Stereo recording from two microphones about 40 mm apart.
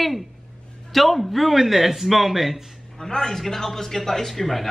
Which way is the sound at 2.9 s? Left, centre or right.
Centre.